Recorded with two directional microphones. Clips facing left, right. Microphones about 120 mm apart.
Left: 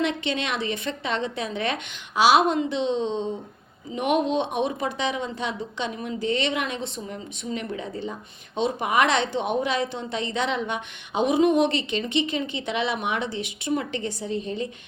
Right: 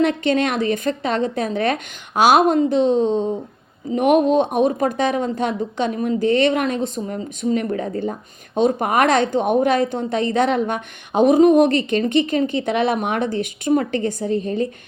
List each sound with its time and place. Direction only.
0.0 s a woman's voice: 45° right (ahead or behind)